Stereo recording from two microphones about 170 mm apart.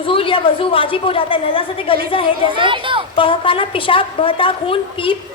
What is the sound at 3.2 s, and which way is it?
A woman's voice, 30° left (ahead or behind).